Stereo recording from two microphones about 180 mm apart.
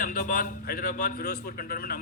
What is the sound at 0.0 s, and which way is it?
A man's voice, 50° left (ahead or behind).